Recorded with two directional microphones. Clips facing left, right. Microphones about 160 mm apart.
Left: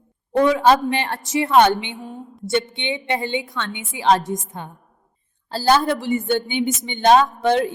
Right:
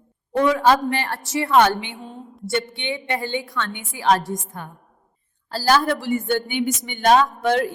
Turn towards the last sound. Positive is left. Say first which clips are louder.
# left 2 dB
turn(degrees=25)  # may be behind; listen again after turning